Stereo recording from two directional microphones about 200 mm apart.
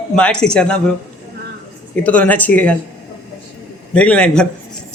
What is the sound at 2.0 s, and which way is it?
Speech, 5° left (ahead or behind).